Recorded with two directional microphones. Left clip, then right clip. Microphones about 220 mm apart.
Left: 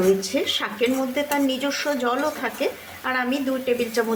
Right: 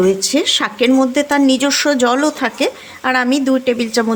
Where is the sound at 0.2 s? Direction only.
50° right (ahead or behind).